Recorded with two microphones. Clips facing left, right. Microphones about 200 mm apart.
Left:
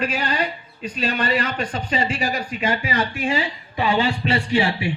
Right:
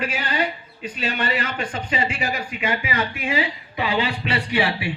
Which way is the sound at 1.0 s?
40° left (ahead or behind).